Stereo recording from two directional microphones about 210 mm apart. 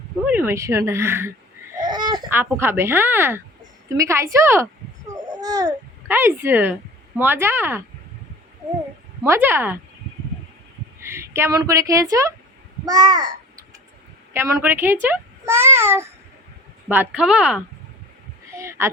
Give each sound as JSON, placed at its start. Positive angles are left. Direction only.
{"t": 0.3, "sound": "a child's voice", "side_deg": -10}
{"t": 9.2, "sound": "speech", "side_deg": -10}
{"t": 11.0, "sound": "a child's voice", "side_deg": -10}
{"t": 18.5, "sound": "a sound", "side_deg": -15}